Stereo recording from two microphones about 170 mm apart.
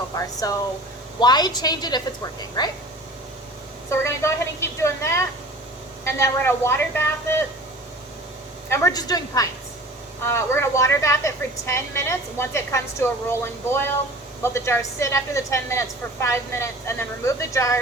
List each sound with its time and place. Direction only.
0.2 s a woman's voice: 20° left (ahead or behind)
3.8 s a woman's voice: 15° left (ahead or behind)
8.7 s a woman's voice: 20° left (ahead or behind)